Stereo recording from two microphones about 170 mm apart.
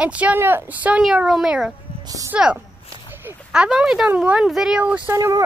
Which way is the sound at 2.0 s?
20° right (ahead or behind).